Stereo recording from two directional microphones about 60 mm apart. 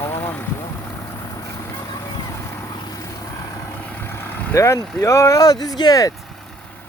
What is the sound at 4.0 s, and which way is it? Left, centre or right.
Vehicle, left.